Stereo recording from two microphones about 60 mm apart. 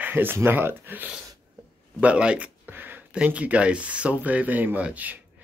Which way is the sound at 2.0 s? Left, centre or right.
Centre.